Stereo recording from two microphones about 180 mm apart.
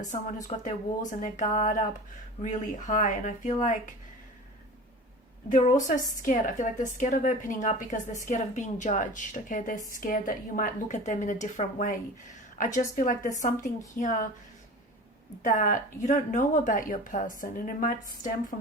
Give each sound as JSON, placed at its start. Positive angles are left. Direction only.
{"t": 0.0, "sound": "a woman's voice", "side_deg": 45}
{"t": 5.5, "sound": "a woman's voice", "side_deg": 45}
{"t": 15.4, "sound": "a woman's voice", "side_deg": 45}